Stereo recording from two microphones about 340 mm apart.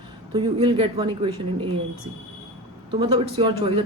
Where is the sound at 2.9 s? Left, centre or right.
Centre.